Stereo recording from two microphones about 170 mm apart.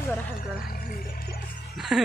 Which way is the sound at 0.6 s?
60° left (ahead or behind).